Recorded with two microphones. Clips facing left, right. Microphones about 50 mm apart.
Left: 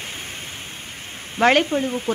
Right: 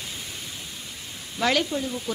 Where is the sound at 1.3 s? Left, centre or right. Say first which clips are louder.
Left 7 dB; left.